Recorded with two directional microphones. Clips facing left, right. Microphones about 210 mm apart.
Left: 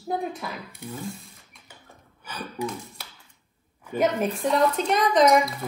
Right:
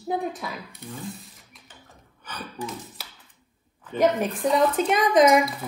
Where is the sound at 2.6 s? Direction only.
Centre (ahead or behind).